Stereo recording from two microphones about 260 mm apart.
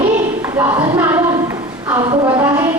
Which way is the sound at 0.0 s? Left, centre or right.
Centre.